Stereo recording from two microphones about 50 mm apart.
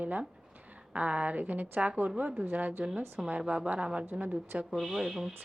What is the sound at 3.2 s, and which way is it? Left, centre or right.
Speech, centre.